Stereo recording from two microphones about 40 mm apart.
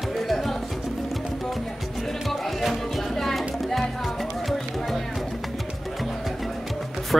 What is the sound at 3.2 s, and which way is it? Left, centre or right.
Music, centre.